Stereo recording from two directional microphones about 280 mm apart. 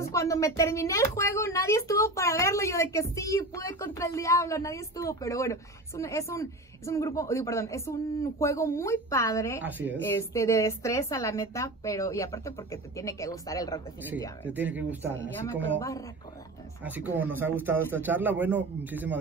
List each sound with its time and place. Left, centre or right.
0.0 s a woman's voice: centre
9.6 s speech: centre
9.9 s a woman's voice: centre
14.5 s speech: centre
16.8 s a man's voice: centre